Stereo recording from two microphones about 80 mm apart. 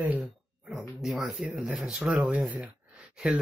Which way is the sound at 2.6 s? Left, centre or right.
Centre.